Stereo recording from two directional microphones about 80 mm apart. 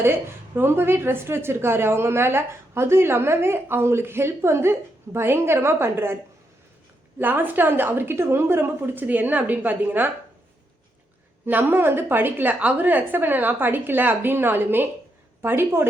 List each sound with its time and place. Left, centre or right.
0.0 s a woman's voice: right
7.2 s a woman's voice: right
11.4 s a woman's voice: right